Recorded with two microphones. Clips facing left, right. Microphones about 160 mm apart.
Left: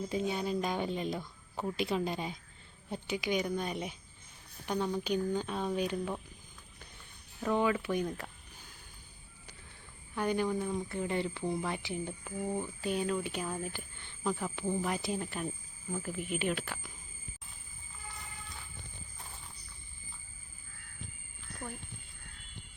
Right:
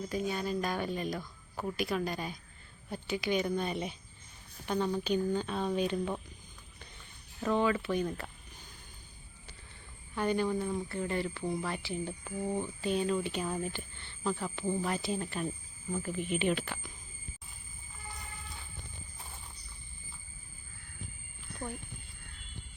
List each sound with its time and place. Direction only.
0.1 s speech: 20° left (ahead or behind)
7.3 s speech: 10° left (ahead or behind)
8.0 s speech: 5° right (ahead or behind)
10.2 s speech: 10° left (ahead or behind)
10.7 s speech: centre (ahead or behind)
10.9 s speech: 15° left (ahead or behind)
12.2 s speech: centre (ahead or behind)